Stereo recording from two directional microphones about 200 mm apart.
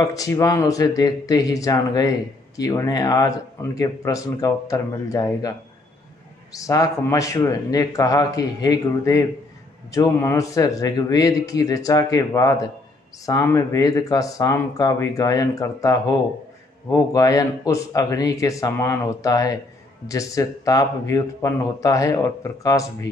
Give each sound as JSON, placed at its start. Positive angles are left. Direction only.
{"t": 0.0, "sound": "speech", "side_deg": 15}
{"t": 6.5, "sound": "speech", "side_deg": 15}